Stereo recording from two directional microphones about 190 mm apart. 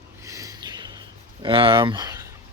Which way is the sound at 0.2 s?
15° right (ahead or behind).